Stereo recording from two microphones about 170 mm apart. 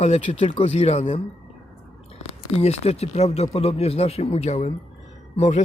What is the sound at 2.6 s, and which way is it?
Speech, 40° left (ahead or behind).